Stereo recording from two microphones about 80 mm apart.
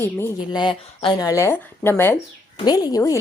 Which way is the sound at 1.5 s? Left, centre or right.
Left.